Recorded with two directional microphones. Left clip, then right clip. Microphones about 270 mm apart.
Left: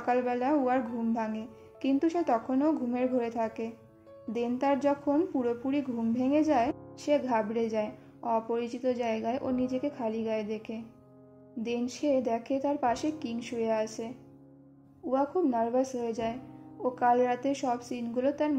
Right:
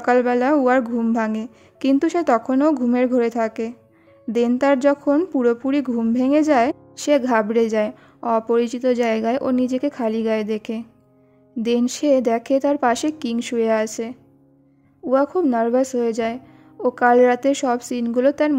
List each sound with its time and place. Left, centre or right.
0.0 s speech: right